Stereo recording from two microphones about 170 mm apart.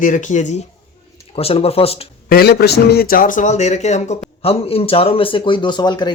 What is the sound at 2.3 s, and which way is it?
A man's voice, 70° left (ahead or behind).